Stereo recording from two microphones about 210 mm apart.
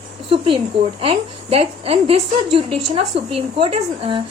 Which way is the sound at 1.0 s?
25° right (ahead or behind).